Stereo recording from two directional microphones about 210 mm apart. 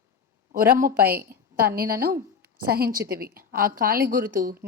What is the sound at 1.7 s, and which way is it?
A woman's voice, 45° right (ahead or behind).